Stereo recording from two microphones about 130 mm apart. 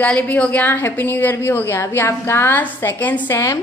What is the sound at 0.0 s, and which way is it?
A woman's voice, 10° left (ahead or behind).